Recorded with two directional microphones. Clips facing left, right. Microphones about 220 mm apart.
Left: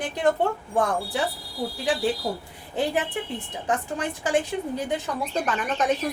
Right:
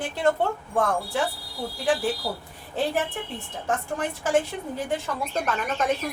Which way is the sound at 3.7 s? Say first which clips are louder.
Left 1 dB; 15° left (ahead or behind).